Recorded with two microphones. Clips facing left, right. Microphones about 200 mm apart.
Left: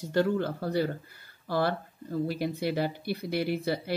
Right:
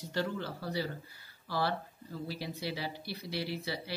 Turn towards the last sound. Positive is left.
turn(degrees=55)  # may be behind; listen again after turning